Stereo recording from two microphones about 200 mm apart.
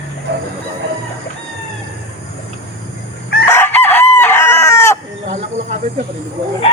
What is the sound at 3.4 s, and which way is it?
Chicken, 10° left (ahead or behind).